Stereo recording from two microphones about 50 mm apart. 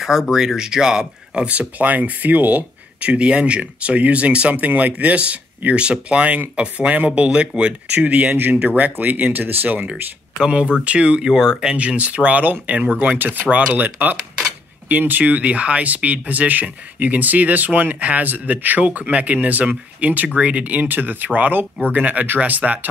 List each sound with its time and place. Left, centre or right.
0.0 s speech: centre
1.8 s speech: right
10.4 s speech: right
11.7 s speech: right